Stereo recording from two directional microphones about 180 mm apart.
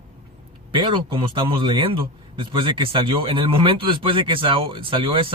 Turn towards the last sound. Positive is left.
turn(degrees=-30)  # may be behind; listen again after turning